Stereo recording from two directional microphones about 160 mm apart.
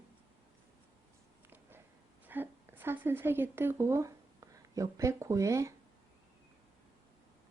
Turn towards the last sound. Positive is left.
turn(degrees=-20)  # may be behind; listen again after turning